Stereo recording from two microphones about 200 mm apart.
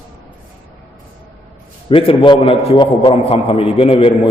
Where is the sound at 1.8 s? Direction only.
25° left (ahead or behind).